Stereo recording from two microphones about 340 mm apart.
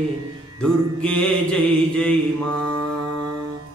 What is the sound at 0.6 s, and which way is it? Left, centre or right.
Mantra, centre.